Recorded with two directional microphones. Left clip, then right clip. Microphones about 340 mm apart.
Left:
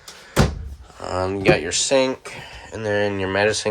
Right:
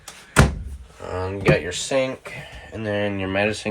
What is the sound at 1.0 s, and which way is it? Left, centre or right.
Speech, centre.